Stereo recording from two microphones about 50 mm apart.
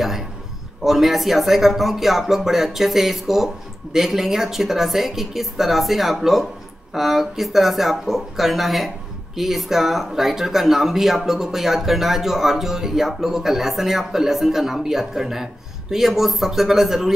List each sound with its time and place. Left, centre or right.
0.8 s speech: centre